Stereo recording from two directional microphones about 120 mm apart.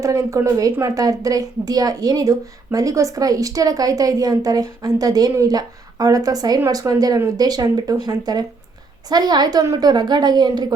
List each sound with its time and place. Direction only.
0.0 s a woman's voice: 25° right (ahead or behind)